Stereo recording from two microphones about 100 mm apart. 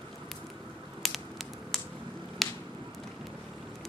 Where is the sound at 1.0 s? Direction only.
Centre (ahead or behind).